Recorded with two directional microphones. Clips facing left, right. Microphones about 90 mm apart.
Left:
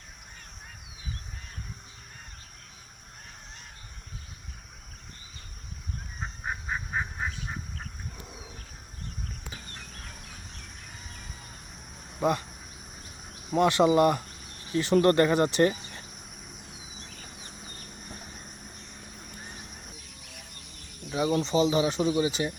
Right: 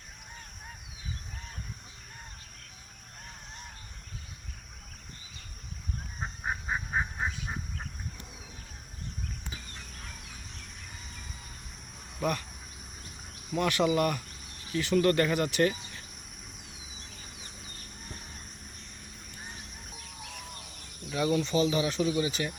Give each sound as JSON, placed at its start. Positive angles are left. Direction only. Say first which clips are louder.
{"t": 6.4, "sound": "goose", "louder": "right 1 dB", "side_deg": -10}
{"t": 12.2, "sound": "speech", "louder": "left 5 dB", "side_deg": 20}
{"t": 13.5, "sound": "speech", "louder": "left 5 dB", "side_deg": 30}
{"t": 21.1, "sound": "speech", "louder": "left 2 dB", "side_deg": 20}